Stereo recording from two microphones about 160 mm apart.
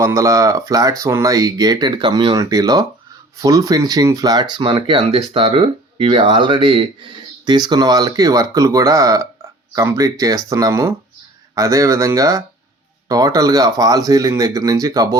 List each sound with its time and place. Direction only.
0.0 s speech: 20° right (ahead or behind)